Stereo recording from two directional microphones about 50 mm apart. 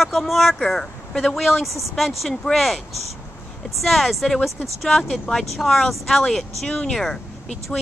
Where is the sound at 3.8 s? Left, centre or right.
Centre.